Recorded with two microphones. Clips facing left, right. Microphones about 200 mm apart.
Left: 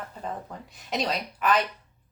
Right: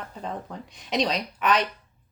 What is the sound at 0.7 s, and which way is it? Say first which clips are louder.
Speech: right 3 dB; 5° left (ahead or behind).